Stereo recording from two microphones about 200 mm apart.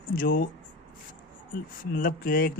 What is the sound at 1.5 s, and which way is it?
Speech, 40° left (ahead or behind).